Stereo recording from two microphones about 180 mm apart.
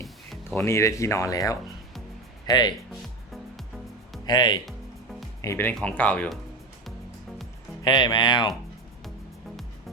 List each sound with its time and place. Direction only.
0.5 s speech: 15° left (ahead or behind)
4.3 s speech: 25° left (ahead or behind); by 6.4 s 5° left (ahead or behind)
7.9 s speech: 25° left (ahead or behind)